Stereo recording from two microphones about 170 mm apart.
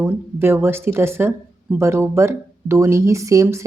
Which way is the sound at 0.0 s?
15° right (ahead or behind).